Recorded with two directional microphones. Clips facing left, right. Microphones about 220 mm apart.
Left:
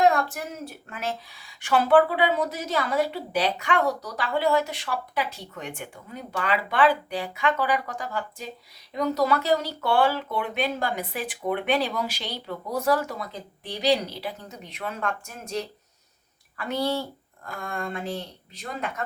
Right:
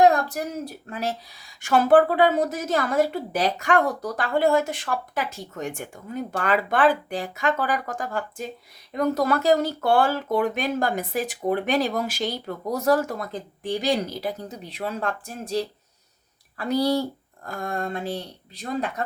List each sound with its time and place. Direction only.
0.0 s a woman's voice: 40° right (ahead or behind)